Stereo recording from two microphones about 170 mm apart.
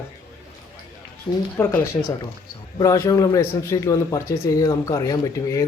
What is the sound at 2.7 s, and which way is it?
A man's voice, 20° left (ahead or behind).